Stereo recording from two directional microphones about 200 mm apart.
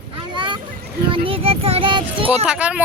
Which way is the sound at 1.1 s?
25° right (ahead or behind).